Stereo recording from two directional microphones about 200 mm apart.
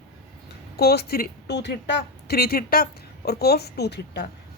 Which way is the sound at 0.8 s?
55° left (ahead or behind).